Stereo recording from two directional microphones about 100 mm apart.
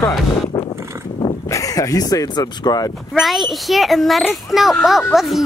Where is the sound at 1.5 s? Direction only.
35° left (ahead or behind).